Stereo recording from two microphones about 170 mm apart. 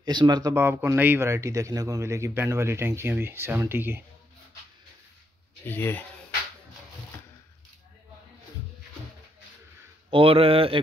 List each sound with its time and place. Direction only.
0.0 s speech: 25° right (ahead or behind)
5.7 s speech: 10° left (ahead or behind)
10.0 s speech: 30° right (ahead or behind)